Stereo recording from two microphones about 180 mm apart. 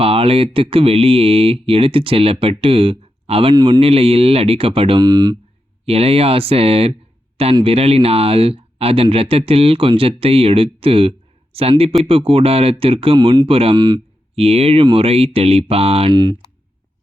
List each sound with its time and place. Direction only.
0.0 s speech: 30° right (ahead or behind)
5.8 s speech: 35° right (ahead or behind)